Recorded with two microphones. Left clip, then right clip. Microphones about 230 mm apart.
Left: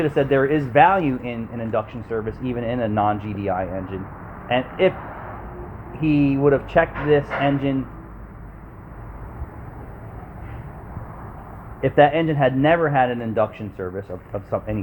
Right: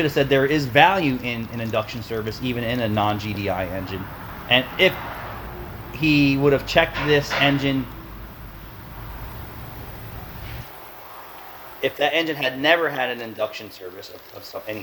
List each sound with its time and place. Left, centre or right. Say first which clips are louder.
0.0 s speech: even; right
6.0 s speech: right 1 dB; right
11.8 s speech: left 5 dB; right